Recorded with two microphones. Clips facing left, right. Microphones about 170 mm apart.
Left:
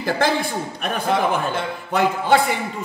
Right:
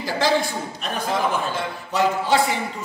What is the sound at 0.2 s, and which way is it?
A man's voice, 55° left (ahead or behind).